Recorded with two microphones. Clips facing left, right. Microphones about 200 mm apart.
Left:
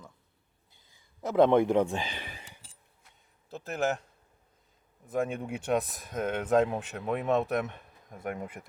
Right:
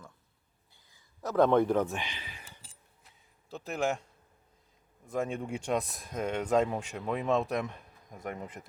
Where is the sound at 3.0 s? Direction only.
Centre (ahead or behind).